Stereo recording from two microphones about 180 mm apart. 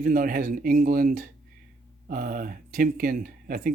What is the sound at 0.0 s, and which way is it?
Speech, 50° right (ahead or behind).